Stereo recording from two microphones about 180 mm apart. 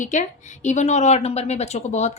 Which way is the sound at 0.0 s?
45° left (ahead or behind).